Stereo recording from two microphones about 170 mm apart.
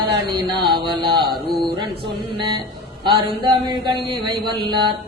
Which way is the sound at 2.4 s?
25° right (ahead or behind).